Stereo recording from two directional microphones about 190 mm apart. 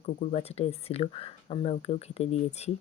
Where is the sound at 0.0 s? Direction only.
35° left (ahead or behind).